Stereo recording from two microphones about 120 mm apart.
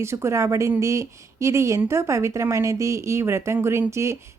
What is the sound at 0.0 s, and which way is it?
A woman's voice, 20° right (ahead or behind).